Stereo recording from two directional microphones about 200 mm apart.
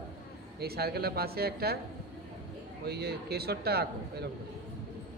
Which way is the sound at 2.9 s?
55° right (ahead or behind).